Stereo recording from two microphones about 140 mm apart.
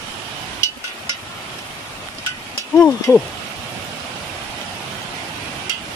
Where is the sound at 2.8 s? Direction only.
20° left (ahead or behind).